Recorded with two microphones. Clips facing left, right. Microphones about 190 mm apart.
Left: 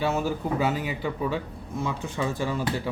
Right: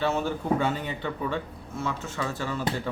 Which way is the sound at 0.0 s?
10° left (ahead or behind).